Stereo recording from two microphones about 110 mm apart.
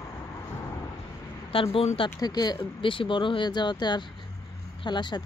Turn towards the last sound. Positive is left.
turn(degrees=45)  # may be behind; listen again after turning